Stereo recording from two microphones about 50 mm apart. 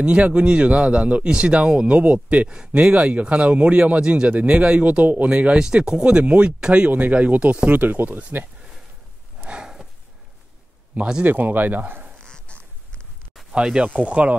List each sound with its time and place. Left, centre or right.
0.0 s speech: right
5.3 s speech: right
9.5 s a sound: centre
11.0 s speech: centre
11.2 s speech: right
12.2 s a sound: centre
13.5 s speech: centre
13.8 s speech: right